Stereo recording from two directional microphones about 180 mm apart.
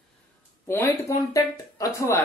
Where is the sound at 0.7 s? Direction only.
15° left (ahead or behind).